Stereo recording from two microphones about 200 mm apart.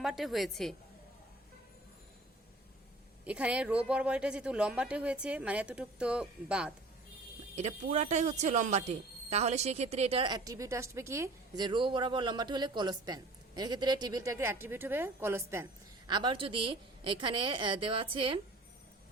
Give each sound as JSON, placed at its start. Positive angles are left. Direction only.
{"t": 0.0, "sound": "speech", "side_deg": 0}
{"t": 3.2, "sound": "speech", "side_deg": -5}
{"t": 7.5, "sound": "speech", "side_deg": -35}